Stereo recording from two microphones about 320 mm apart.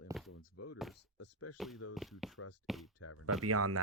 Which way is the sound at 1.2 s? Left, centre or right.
Left.